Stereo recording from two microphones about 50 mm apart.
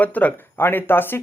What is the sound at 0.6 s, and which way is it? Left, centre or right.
Speech, left.